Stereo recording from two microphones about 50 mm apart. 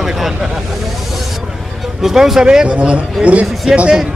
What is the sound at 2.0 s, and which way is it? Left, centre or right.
A man's voice, centre.